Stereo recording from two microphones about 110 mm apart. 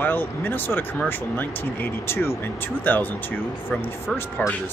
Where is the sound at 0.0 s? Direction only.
20° left (ahead or behind).